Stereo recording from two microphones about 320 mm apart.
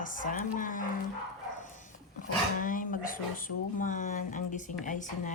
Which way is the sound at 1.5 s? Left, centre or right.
Left.